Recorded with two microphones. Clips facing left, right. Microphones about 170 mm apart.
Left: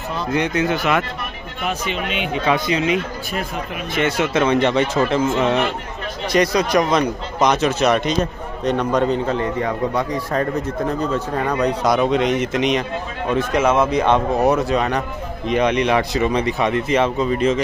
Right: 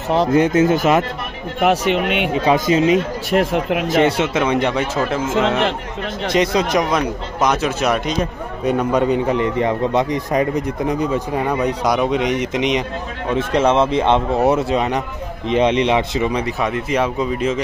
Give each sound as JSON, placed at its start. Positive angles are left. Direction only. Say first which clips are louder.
{"t": 0.3, "sound": "speech", "louder": "right 4 dB", "side_deg": -45}
{"t": 1.6, "sound": "speech", "louder": "right 8 dB", "side_deg": -70}
{"t": 2.3, "sound": "speech", "louder": "right 3 dB", "side_deg": -40}
{"t": 3.3, "sound": "speech", "louder": "right 9 dB", "side_deg": -85}
{"t": 4.2, "sound": "a man's voice", "louder": "left 1 dB", "side_deg": -15}
{"t": 6.3, "sound": "speech", "louder": "even", "side_deg": -25}
{"t": 6.9, "sound": "a man's voice", "louder": "left 1 dB", "side_deg": -5}
{"t": 13.3, "sound": "speech", "louder": "right 1 dB", "side_deg": -30}
{"t": 16.3, "sound": "a man's voice", "louder": "left 1 dB", "side_deg": -5}